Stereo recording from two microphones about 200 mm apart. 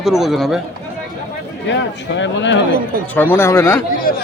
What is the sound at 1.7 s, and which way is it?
Speech, 65° left (ahead or behind).